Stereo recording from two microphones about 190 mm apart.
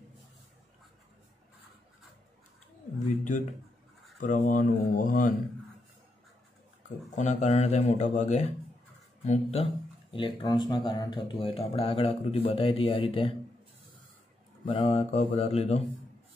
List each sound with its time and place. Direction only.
4.2 s speech: 45° left (ahead or behind)
7.2 s speech: 40° left (ahead or behind)
10.1 s speech: 25° left (ahead or behind)
14.7 s speech: 25° left (ahead or behind)